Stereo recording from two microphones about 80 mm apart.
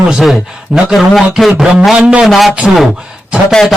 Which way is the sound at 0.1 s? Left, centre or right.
Centre.